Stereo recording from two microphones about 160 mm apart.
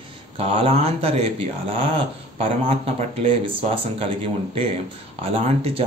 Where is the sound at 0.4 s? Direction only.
35° right (ahead or behind).